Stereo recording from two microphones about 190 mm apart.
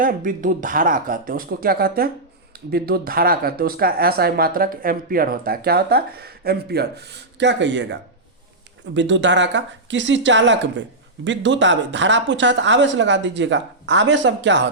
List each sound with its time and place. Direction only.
0.0 s speech: 45° right (ahead or behind); by 7.9 s 70° right (ahead or behind)
9.0 s speech: 70° right (ahead or behind)